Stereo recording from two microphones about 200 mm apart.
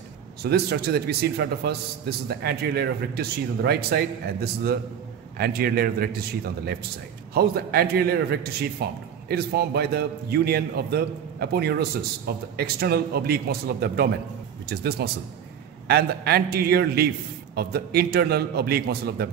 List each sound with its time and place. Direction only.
0.4 s a man's voice: 55° right (ahead or behind)
7.3 s a man's voice: 50° right (ahead or behind)